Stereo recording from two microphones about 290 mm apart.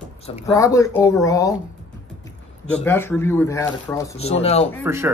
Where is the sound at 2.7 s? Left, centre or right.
Centre.